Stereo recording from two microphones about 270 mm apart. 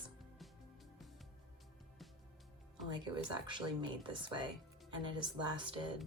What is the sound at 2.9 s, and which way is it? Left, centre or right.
Speech, centre.